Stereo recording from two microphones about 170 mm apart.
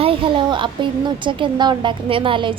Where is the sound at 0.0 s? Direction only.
30° right (ahead or behind).